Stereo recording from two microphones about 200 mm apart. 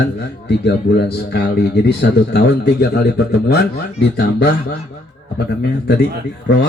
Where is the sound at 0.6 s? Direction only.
55° left (ahead or behind).